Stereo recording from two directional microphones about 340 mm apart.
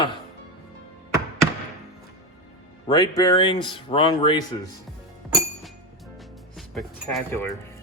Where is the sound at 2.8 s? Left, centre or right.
Centre.